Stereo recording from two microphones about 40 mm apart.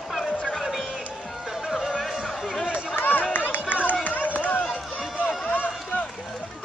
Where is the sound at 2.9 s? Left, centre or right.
Left.